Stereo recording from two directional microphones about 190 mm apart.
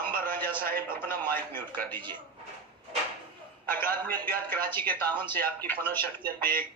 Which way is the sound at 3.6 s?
10° left (ahead or behind).